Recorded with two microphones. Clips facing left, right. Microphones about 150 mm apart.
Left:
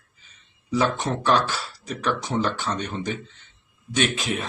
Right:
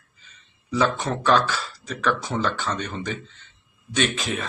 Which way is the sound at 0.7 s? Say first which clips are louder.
Even; 15° left (ahead or behind).